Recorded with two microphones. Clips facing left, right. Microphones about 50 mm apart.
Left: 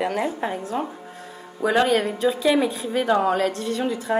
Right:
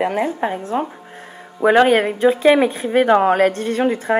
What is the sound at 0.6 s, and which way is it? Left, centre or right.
Speech, right.